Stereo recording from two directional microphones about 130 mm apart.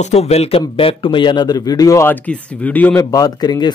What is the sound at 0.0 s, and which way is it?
A man's voice, 55° left (ahead or behind).